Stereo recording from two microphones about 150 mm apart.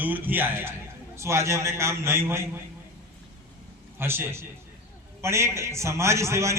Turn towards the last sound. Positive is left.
turn(degrees=-20)  # may be behind; listen again after turning